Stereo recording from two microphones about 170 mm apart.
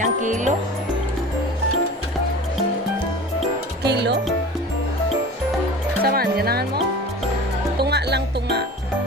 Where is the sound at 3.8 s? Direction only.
80° right.